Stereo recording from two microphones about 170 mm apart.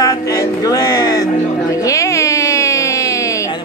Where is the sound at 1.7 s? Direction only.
20° left (ahead or behind).